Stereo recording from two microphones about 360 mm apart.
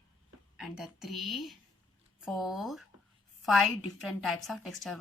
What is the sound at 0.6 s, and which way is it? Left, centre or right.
Speech, centre.